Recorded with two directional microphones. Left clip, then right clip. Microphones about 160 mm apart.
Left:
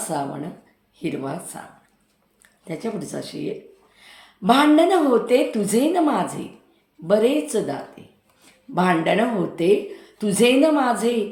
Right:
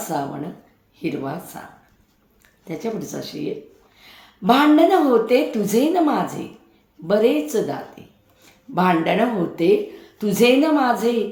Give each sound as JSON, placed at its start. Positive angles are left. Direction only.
{"t": 0.1, "sound": "speech", "side_deg": 10}
{"t": 2.6, "sound": "speech", "side_deg": 10}
{"t": 8.0, "sound": "a sound", "side_deg": 5}
{"t": 8.7, "sound": "speech", "side_deg": 5}